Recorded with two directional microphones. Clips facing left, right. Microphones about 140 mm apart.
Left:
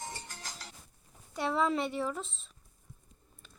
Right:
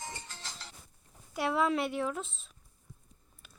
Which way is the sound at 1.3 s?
5° right (ahead or behind).